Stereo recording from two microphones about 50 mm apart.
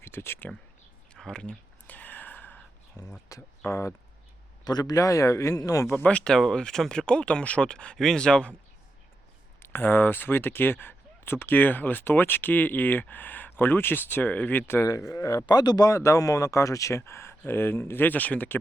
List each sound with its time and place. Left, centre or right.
0.0 s speech: left
1.2 s speech: centre
1.9 s a sound: left
3.3 s speech: left
3.7 s speech: left
5.1 s speech: left
5.9 s speech: left
6.2 s speech: centre
9.6 s speech: left
14.8 s speech: left
17.0 s speech: left
17.4 s speech: left